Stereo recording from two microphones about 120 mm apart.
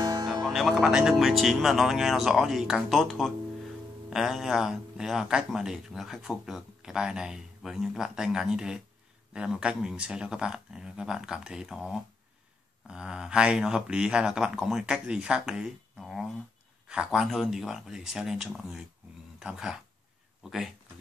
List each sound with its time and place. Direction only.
0.0 s music: 35° right (ahead or behind)
0.3 s speech: centre (ahead or behind)